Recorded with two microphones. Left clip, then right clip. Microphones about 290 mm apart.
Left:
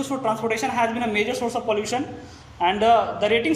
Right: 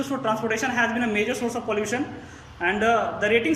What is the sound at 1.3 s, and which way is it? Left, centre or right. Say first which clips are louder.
A man's voice: left 3 dB; left.